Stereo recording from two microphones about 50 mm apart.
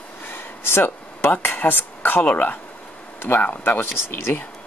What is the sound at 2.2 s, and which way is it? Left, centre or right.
Speech, left.